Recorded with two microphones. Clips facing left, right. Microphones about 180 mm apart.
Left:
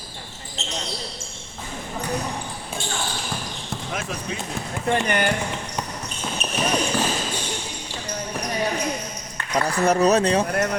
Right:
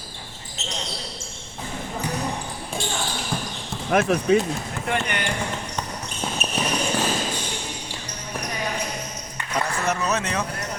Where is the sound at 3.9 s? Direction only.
60° right (ahead or behind).